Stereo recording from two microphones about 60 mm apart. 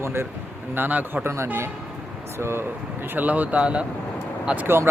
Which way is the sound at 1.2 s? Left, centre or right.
Right.